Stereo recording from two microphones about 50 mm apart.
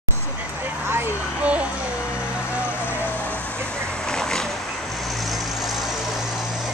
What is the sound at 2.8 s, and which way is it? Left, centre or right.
Vehicle, left.